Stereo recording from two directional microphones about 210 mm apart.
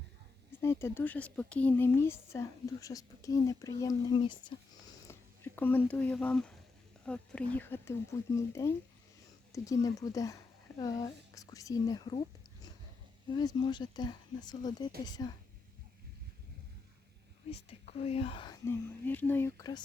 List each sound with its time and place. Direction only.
0.6 s speech: 10° left (ahead or behind)
5.5 s speech: 10° left (ahead or behind)
13.3 s speech: 20° left (ahead or behind)
17.5 s speech: 30° left (ahead or behind)